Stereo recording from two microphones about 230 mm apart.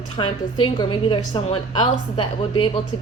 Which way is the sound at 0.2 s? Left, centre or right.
Left.